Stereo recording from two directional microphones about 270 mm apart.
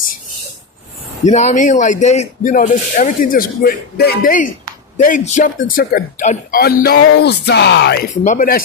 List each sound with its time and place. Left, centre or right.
1.2 s a man's voice: left
8.2 s a man's voice: left